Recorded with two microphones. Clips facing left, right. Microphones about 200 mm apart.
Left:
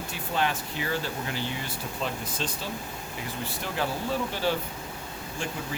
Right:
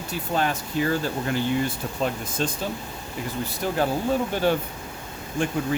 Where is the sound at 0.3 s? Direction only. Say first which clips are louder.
Right 4 dB; 45° right (ahead or behind).